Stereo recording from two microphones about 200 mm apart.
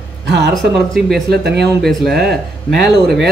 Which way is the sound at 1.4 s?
55° right (ahead or behind).